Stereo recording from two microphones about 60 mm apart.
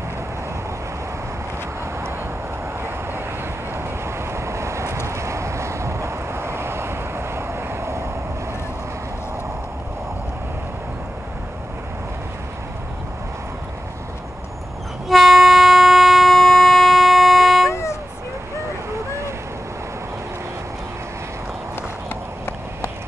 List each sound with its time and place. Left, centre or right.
4.3 s vehicle: right
15.0 s train: centre
17.6 s a sound: left